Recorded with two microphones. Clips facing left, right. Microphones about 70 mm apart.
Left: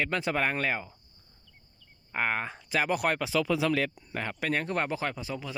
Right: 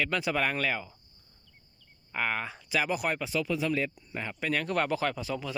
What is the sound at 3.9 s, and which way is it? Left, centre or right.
Speech, left.